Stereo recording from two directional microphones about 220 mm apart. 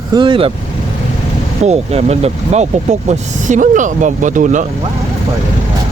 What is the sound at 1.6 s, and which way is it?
Speech, 30° right (ahead or behind).